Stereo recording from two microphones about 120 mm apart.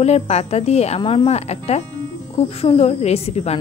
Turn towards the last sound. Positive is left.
turn(degrees=60)  # may be behind; listen again after turning